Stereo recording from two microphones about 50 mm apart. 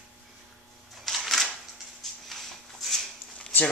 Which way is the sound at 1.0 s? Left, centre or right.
Centre.